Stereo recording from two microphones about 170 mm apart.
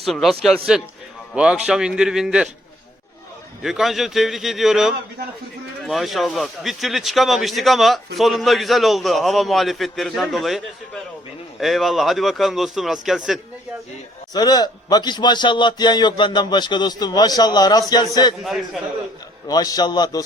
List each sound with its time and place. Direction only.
0.0 s a man's voice: centre (ahead or behind)
3.6 s a man's voice: centre (ahead or behind)
14.3 s a man's voice: 25° left (ahead or behind)
19.5 s a man's voice: 20° left (ahead or behind)